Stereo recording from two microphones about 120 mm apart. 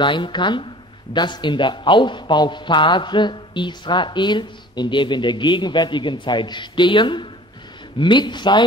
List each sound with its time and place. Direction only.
0.0 s a man's voice: 40° left (ahead or behind)